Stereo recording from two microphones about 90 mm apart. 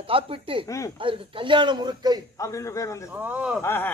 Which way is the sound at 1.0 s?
65° right (ahead or behind).